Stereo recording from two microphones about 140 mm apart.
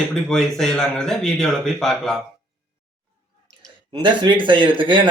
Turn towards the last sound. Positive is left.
turn(degrees=-35)  # may be behind; listen again after turning